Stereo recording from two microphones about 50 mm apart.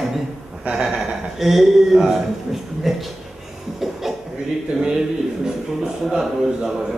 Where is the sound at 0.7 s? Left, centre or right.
Centre.